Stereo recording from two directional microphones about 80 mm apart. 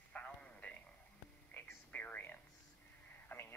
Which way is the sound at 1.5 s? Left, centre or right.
Left.